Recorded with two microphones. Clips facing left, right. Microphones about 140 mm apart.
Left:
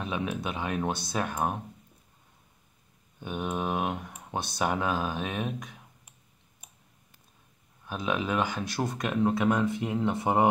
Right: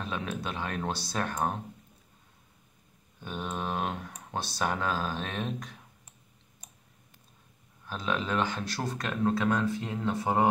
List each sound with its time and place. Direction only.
0.0 s speech: 15° left (ahead or behind)
3.2 s speech: 15° left (ahead or behind)
7.8 s speech: 15° left (ahead or behind)